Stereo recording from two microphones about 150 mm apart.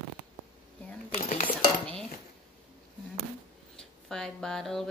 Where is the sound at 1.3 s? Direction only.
55° left (ahead or behind).